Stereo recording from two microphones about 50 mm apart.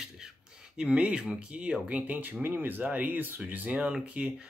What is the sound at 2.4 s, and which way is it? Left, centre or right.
Speech, right.